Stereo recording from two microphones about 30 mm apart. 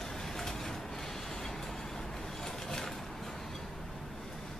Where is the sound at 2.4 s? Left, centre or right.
Centre.